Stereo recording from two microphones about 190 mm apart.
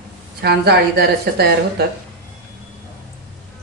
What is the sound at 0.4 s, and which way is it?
Speech, 55° right (ahead or behind).